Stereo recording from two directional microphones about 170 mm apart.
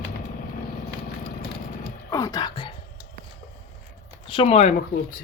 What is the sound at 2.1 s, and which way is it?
Speech, 20° left (ahead or behind).